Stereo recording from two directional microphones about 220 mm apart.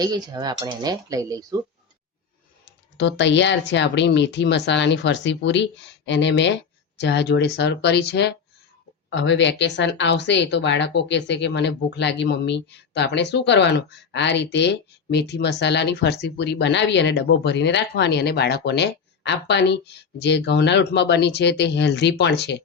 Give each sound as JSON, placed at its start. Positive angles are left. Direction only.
{"t": 0.0, "sound": "speech", "side_deg": -20}
{"t": 3.0, "sound": "a woman's voice", "side_deg": 55}